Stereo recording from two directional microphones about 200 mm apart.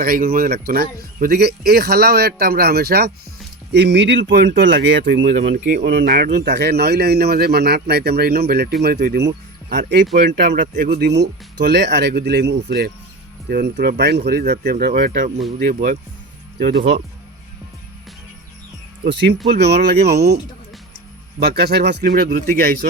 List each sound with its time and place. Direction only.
0.0 s speech: 50° right (ahead or behind)
5.2 s speech: 45° right (ahead or behind)
19.0 s speech: 60° right (ahead or behind)